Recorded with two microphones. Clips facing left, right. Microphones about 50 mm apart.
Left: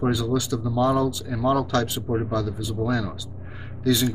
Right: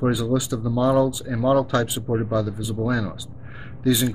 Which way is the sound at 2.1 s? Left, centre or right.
Centre.